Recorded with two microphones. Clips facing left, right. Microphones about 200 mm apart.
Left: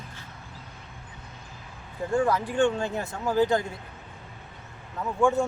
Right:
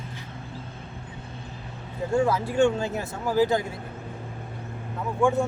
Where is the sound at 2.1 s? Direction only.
10° right (ahead or behind).